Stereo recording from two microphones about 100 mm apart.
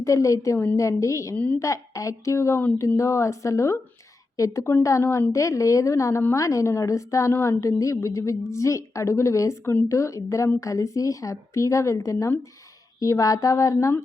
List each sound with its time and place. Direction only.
0.0 s a woman's voice: 30° left (ahead or behind)